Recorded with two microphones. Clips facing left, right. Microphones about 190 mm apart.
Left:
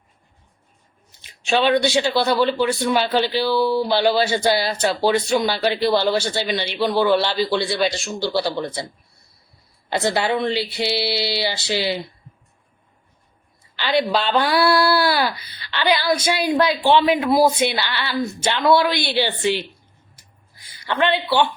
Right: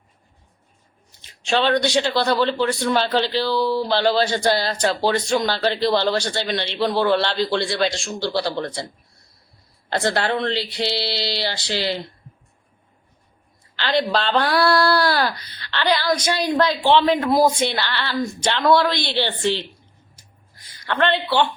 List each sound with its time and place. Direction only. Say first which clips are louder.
1.5 s speech: left 2 dB; 10° left (ahead or behind)
9.9 s speech: left 1 dB; 10° left (ahead or behind)
13.7 s speech: left 1 dB; 5° left (ahead or behind)
20.8 s speech: even; 10° left (ahead or behind)